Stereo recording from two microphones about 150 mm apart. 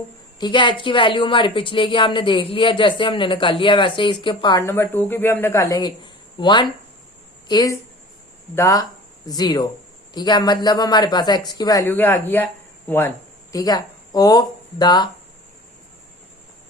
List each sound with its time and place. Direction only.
0.3 s a woman's voice: 30° left (ahead or behind)
4.6 s speech: 15° left (ahead or behind)